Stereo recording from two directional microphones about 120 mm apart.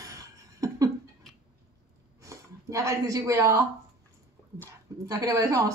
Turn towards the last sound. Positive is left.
turn(degrees=-30)  # may be behind; listen again after turning